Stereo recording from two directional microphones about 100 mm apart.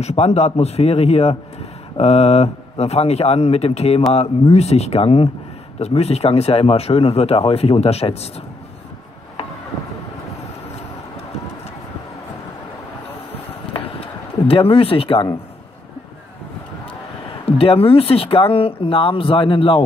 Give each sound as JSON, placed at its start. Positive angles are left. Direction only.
{"t": 0.0, "sound": "speech", "side_deg": 90}
{"t": 14.5, "sound": "speech", "side_deg": 70}
{"t": 17.5, "sound": "speech", "side_deg": 70}